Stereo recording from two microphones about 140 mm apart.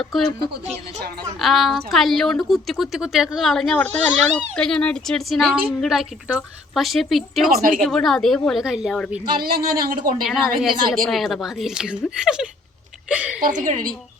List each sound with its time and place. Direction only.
0.1 s speech: centre (ahead or behind)
1.4 s speech: centre (ahead or behind)
7.5 s speech: 80° right
7.9 s speech: 5° left (ahead or behind)
9.4 s speech: 90° right
10.2 s a woman's voice: centre (ahead or behind)
13.4 s a woman's voice: 70° right (ahead or behind)